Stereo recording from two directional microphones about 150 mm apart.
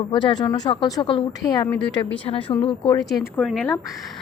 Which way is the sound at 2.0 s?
35° left (ahead or behind).